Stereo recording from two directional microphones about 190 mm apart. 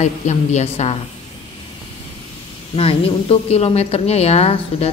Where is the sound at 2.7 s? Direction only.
30° left (ahead or behind).